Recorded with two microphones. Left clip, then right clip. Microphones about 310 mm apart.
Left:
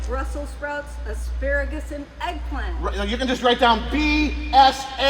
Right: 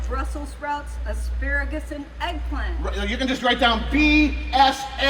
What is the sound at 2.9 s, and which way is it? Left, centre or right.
A man's voice, centre.